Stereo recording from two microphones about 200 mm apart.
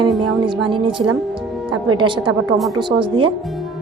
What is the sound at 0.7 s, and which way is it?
A woman's voice, 25° right (ahead or behind).